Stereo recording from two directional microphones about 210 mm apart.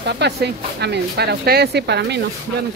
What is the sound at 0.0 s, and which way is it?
Speech, 50° right (ahead or behind).